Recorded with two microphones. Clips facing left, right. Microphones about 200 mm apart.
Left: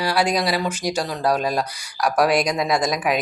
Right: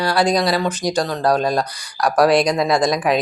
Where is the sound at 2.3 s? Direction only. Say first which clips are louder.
Right 4 dB; 30° right (ahead or behind).